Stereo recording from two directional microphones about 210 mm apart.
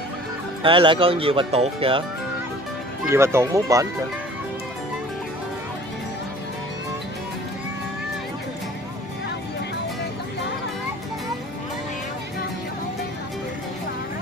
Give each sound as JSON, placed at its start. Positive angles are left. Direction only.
{"t": 0.6, "sound": "speech", "side_deg": -25}
{"t": 3.1, "sound": "speech", "side_deg": -10}